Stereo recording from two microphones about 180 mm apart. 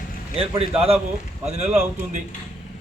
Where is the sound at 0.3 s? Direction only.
30° right (ahead or behind).